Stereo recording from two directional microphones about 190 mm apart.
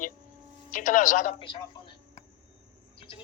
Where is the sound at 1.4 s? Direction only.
25° left (ahead or behind).